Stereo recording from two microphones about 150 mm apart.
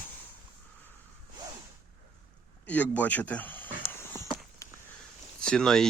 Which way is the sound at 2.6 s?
10° left (ahead or behind).